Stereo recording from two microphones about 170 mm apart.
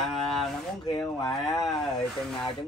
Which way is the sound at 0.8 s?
20° left (ahead or behind).